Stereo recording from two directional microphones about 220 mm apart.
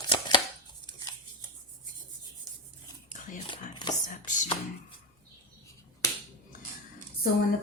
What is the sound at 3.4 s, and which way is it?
Chopping, 20° left (ahead or behind).